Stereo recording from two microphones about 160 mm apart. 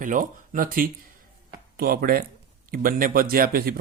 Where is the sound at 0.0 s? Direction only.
55° right (ahead or behind).